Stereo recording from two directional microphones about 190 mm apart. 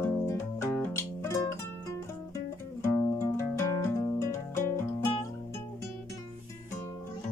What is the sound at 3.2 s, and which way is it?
Music, 15° left (ahead or behind).